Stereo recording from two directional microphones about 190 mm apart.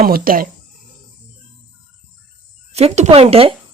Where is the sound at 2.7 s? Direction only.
35° right (ahead or behind).